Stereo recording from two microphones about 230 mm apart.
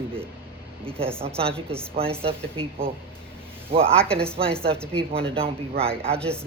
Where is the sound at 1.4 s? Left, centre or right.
Right.